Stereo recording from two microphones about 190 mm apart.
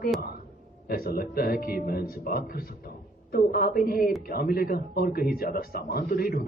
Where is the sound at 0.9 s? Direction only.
50° left (ahead or behind).